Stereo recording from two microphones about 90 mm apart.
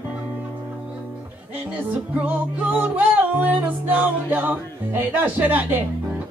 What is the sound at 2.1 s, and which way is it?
Music, 20° right (ahead or behind).